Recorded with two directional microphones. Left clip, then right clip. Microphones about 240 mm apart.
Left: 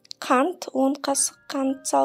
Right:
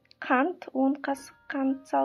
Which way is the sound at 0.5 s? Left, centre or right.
Left.